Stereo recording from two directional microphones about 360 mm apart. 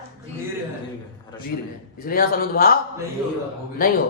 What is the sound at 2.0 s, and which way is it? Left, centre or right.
Speech, left.